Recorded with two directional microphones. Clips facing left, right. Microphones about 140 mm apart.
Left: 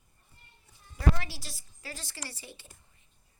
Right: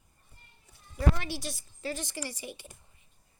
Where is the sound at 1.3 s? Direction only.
20° right (ahead or behind).